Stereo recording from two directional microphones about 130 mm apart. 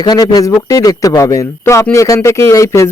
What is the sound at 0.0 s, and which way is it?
Speech, 35° left (ahead or behind).